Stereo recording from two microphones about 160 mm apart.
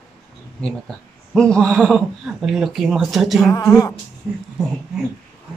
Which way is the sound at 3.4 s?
20° left (ahead or behind).